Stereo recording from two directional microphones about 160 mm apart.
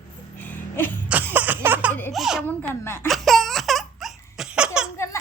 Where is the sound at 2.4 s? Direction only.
15° left (ahead or behind).